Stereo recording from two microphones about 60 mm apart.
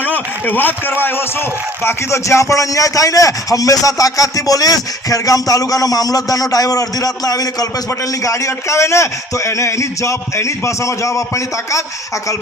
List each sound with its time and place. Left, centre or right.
0.0 s a man's voice: left
1.8 s a man's voice: left
8.2 s a man's voice: left